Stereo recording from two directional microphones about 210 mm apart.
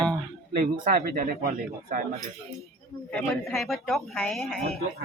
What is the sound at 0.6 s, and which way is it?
Speech, 45° right (ahead or behind).